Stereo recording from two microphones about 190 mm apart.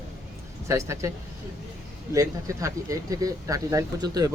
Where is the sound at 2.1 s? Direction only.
15° right (ahead or behind).